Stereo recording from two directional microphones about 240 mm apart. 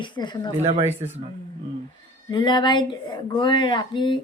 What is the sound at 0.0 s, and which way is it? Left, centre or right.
Speech, centre.